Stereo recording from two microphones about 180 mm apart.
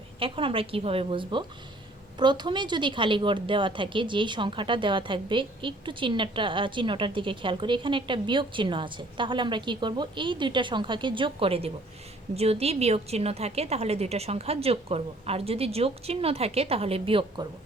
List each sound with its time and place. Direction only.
0.2 s a woman's voice: 30° right (ahead or behind)